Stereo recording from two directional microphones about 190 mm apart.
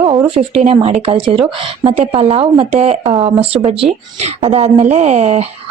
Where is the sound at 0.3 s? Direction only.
30° right (ahead or behind).